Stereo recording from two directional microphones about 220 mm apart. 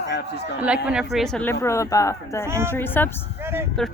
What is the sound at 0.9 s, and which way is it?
Speech, centre (ahead or behind).